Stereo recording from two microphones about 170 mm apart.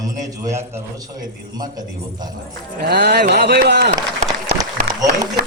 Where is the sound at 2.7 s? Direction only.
70° right (ahead or behind).